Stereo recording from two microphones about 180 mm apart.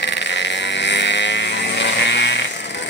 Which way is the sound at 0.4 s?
75° left (ahead or behind).